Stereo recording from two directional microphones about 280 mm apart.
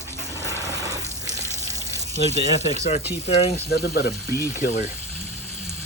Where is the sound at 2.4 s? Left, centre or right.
Left.